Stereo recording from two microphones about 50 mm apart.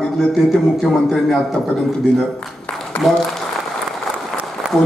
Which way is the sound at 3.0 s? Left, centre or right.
Centre.